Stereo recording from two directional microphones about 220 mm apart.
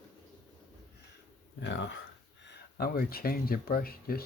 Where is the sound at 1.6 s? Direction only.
55° left (ahead or behind).